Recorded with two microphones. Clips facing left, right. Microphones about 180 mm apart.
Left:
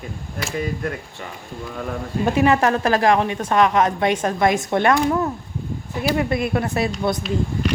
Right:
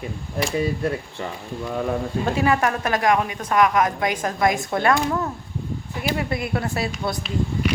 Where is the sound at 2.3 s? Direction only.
25° left (ahead or behind).